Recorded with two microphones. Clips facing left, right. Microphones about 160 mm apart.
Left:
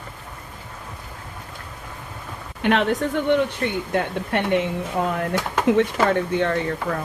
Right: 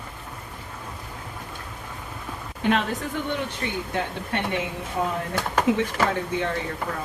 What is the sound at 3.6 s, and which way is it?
Speech, 60° left (ahead or behind).